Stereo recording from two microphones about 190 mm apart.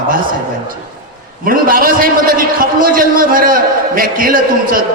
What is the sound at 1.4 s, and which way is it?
A man's voice, 50° right (ahead or behind).